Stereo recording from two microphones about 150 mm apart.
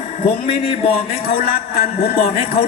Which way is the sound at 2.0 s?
90° left.